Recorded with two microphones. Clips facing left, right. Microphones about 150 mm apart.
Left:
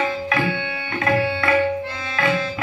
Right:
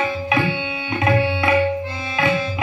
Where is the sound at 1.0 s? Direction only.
20° right (ahead or behind).